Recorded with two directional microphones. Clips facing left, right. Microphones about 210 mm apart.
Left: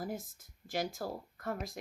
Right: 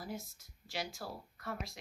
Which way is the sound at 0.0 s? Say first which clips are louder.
Left 4 dB; 50° left (ahead or behind).